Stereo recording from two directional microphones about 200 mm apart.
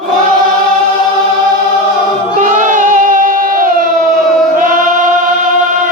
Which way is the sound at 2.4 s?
40° right (ahead or behind).